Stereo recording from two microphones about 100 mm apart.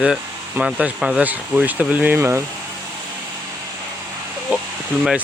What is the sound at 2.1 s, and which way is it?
Speech, 25° right (ahead or behind).